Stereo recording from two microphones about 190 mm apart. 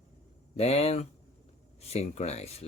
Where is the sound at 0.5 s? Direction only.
35° left (ahead or behind).